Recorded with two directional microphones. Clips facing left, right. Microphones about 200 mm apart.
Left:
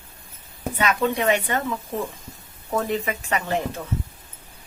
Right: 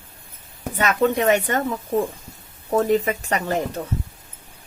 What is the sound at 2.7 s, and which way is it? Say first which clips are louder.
Speech: right 6 dB; 40° right (ahead or behind).